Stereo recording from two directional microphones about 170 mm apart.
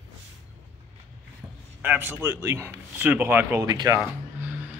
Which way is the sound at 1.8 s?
10° right (ahead or behind).